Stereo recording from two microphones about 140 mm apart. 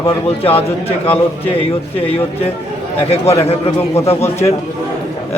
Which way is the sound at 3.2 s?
45° left (ahead or behind).